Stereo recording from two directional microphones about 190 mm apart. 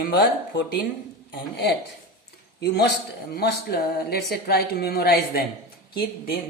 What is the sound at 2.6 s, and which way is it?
A woman's voice, 65° left (ahead or behind).